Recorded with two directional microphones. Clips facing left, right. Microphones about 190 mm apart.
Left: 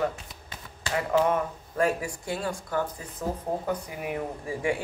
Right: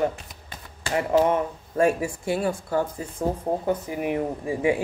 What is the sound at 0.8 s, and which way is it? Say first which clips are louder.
Speech: right 4 dB; 30° right (ahead or behind).